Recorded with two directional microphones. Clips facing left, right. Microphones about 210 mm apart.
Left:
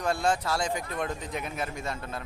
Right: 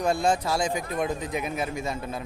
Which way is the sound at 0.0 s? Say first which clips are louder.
Right 3 dB; 15° right (ahead or behind).